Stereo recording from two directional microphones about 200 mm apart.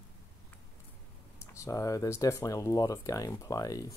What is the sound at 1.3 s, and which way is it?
Speech, 15° left (ahead or behind).